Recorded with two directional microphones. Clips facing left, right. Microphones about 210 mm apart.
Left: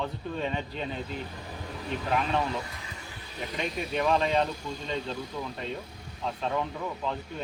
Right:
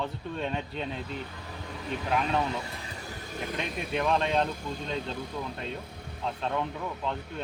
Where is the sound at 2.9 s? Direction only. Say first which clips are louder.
Right 5 dB; 40° right (ahead or behind).